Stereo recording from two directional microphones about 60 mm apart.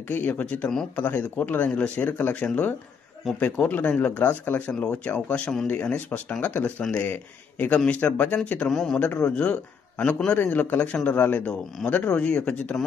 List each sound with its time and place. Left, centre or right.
0.1 s speech: left
1.7 s speech: centre
2.0 s speech: left
3.3 s speech: centre
3.6 s speech: left
4.6 s speech: left
8.6 s speech: centre